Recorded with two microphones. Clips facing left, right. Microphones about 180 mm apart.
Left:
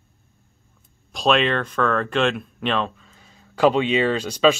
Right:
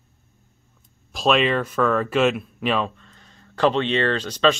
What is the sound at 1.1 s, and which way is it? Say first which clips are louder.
Speech: even; centre (ahead or behind).